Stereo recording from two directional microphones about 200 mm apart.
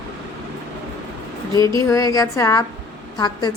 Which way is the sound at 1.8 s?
15° left (ahead or behind).